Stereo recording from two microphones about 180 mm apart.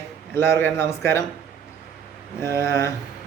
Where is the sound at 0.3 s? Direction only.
15° left (ahead or behind).